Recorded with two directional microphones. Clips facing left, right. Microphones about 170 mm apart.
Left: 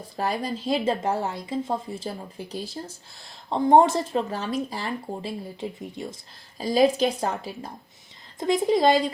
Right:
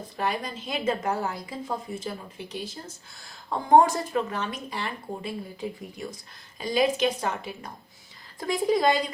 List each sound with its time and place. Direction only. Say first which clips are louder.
0.2 s a woman's voice: left 3 dB; 35° left (ahead or behind)
3.2 s a woman's voice: left 4 dB; 25° left (ahead or behind)
8.4 s speech: left 3 dB; 25° left (ahead or behind)